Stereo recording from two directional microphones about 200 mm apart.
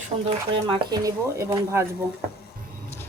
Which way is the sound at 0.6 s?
20° right (ahead or behind).